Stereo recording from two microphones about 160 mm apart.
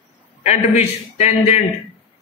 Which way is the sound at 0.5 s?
45° left (ahead or behind).